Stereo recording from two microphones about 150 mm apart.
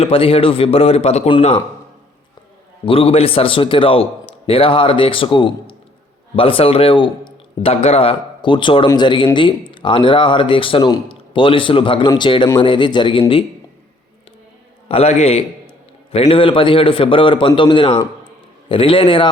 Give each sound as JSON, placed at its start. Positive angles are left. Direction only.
{"t": 0.0, "sound": "a man's voice", "side_deg": 40}
{"t": 2.8, "sound": "speech", "side_deg": 40}
{"t": 14.8, "sound": "a man's voice", "side_deg": 45}